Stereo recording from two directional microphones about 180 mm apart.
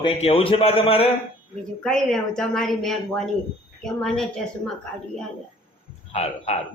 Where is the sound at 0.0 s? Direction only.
35° left (ahead or behind).